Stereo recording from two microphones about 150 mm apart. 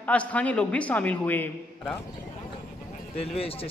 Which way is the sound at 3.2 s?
40° left (ahead or behind).